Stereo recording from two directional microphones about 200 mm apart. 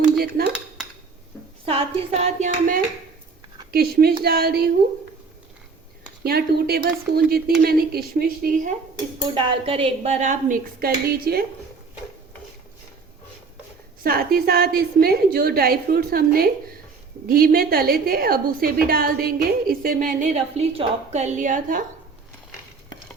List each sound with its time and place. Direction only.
1.6 s a woman's voice: 30° right (ahead or behind)
3.7 s a woman's voice: 50° right (ahead or behind)
6.2 s a woman's voice: 50° right (ahead or behind)
9.3 s a woman's voice: 25° right (ahead or behind); by 11.4 s 50° right (ahead or behind)
14.0 s a woman's voice: 50° right (ahead or behind)